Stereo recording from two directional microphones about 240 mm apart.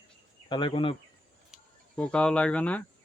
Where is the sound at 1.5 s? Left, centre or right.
Centre.